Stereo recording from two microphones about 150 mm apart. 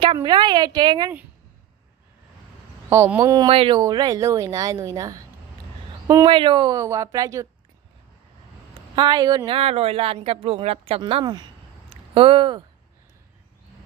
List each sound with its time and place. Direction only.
0.0 s a woman's voice: 30° right (ahead or behind)
2.9 s a woman's voice: 15° right (ahead or behind)
3.3 s a woman's voice: 35° right (ahead or behind)
6.2 s a woman's voice: 35° right (ahead or behind)
8.7 s speech: 30° right (ahead or behind)
11.9 s a sound: 35° right (ahead or behind)